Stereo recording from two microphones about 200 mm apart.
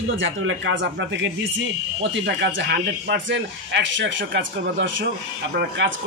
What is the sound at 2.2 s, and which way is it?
A man's voice, 60° right (ahead or behind).